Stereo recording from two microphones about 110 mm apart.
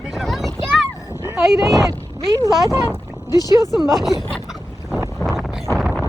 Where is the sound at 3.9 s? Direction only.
Centre (ahead or behind).